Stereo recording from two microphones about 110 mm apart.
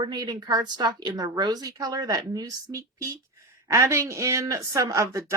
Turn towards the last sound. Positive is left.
turn(degrees=-25)  # may be behind; listen again after turning